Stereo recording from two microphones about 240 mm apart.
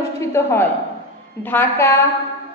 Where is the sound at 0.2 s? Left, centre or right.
Centre.